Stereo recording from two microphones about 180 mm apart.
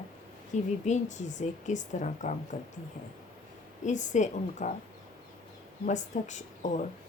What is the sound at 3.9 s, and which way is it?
Speech, 40° left (ahead or behind).